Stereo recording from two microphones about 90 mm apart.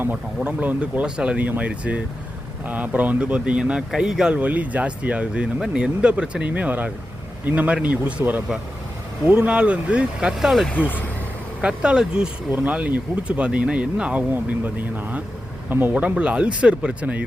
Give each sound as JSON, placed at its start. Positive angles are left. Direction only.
{"t": 0.3, "sound": "speech", "side_deg": -15}
{"t": 10.7, "sound": "speech", "side_deg": 20}
{"t": 11.6, "sound": "speech", "side_deg": -10}